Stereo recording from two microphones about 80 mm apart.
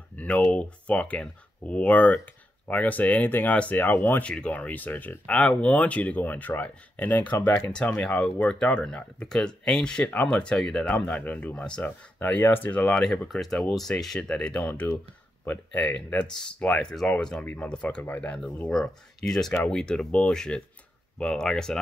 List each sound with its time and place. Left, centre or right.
0.1 s speech: centre
4.2 s speech: centre
11.8 s speech: left
18.0 s speech: left
18.7 s speech: centre